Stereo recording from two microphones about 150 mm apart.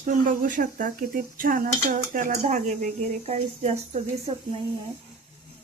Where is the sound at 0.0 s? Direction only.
60° right (ahead or behind); by 4.0 s 45° right (ahead or behind).